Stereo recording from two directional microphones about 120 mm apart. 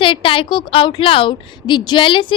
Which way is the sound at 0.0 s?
45° left (ahead or behind).